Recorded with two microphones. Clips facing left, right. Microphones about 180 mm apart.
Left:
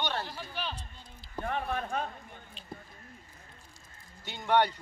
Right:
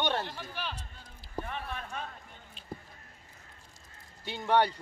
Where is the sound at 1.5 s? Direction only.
50° left (ahead or behind).